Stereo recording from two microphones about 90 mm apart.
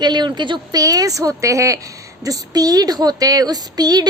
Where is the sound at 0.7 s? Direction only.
45° right (ahead or behind).